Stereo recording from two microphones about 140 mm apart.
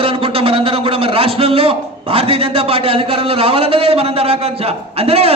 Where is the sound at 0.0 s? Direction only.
40° right (ahead or behind).